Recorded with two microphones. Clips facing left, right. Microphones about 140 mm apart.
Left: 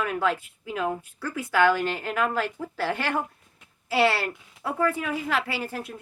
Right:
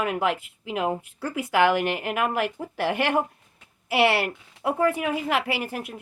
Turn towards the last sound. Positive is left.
turn(degrees=-15)  # may be behind; listen again after turning